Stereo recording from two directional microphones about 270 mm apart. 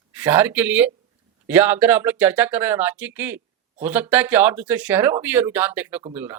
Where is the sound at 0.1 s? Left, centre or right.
Centre.